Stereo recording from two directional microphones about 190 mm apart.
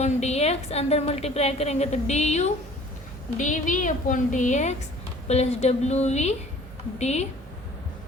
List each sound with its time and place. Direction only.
0.0 s a woman's voice: 35° left (ahead or behind)